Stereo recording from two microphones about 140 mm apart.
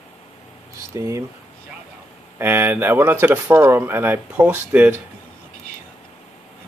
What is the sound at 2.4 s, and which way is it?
Speech, 15° right (ahead or behind).